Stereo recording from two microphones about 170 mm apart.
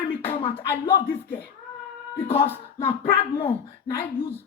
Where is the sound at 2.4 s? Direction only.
15° left (ahead or behind).